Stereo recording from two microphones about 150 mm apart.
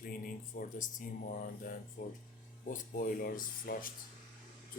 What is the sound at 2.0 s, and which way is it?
Speech, 90° left.